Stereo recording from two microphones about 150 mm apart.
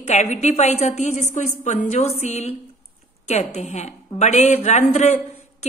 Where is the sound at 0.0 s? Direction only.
50° left (ahead or behind).